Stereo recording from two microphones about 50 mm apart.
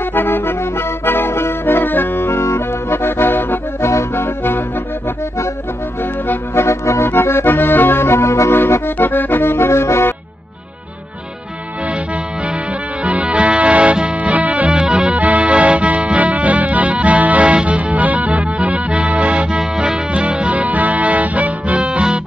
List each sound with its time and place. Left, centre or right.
0.0 s accordion: left
3.8 s music: left
6.5 s music: left
7.2 s accordion: left
8.9 s music: left
13.0 s music: right
14.8 s music: centre
15.1 s music: right